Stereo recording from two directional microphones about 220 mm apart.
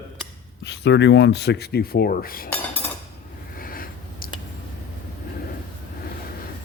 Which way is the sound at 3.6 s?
40° left (ahead or behind).